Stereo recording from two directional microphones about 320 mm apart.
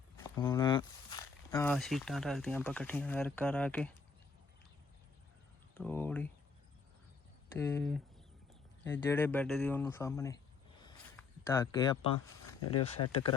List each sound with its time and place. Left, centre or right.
0.2 s speech: centre
5.7 s speech: centre
7.6 s speech: centre
10.8 s a sound: centre
12.8 s speech: centre